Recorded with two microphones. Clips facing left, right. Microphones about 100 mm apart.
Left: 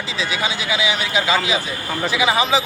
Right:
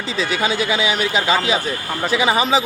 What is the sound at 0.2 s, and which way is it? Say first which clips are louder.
Speech: right 4 dB; 45° right (ahead or behind).